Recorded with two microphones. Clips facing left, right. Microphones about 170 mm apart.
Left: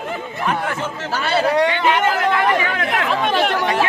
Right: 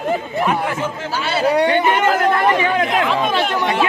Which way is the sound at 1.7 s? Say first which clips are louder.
Right 2 dB; 50° right (ahead or behind).